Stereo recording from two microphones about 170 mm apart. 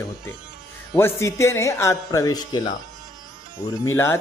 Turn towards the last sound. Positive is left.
turn(degrees=15)  # may be behind; listen again after turning